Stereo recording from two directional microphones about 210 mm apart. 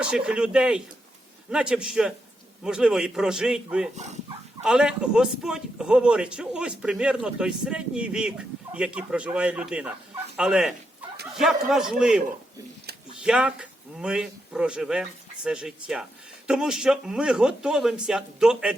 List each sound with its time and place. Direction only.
0.0 s speech: 5° right (ahead or behind)
3.9 s speech: 35° right (ahead or behind)
4.6 s speech: 5° right (ahead or behind)
13.2 s speech: 5° right (ahead or behind)